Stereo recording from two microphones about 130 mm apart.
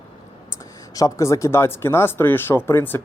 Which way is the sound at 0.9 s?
25° left (ahead or behind).